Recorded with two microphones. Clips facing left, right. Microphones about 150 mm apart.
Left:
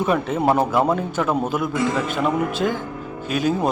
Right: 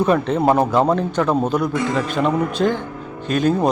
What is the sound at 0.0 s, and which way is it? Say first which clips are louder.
Speech: right 3 dB; 5° left (ahead or behind).